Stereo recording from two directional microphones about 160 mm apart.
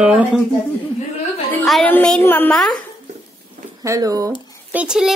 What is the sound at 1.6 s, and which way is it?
A child's voice, centre (ahead or behind).